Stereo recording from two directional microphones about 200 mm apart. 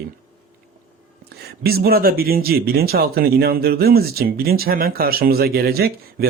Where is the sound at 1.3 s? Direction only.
50° right (ahead or behind).